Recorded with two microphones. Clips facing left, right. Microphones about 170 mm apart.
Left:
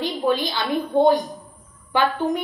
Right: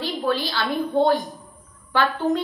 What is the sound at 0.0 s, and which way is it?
A woman's voice, 15° left (ahead or behind).